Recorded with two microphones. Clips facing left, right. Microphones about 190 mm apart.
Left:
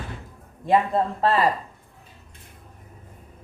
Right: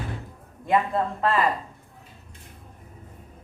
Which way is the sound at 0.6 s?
30° left (ahead or behind).